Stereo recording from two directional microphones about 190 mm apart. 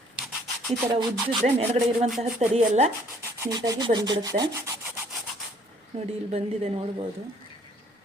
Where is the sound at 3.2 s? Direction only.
15° right (ahead or behind).